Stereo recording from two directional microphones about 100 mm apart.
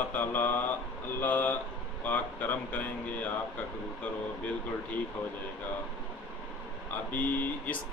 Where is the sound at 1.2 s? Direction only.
20° left (ahead or behind).